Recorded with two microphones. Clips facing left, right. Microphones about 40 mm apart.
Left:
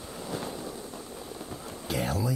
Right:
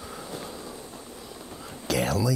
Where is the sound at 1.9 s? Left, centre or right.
Right.